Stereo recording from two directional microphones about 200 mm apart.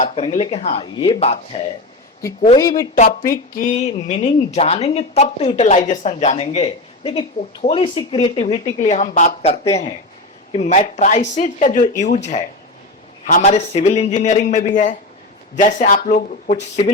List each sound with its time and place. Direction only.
0.0 s speech: 35° left (ahead or behind)
2.6 s speech: 15° left (ahead or behind)
2.9 s speech: 45° left (ahead or behind)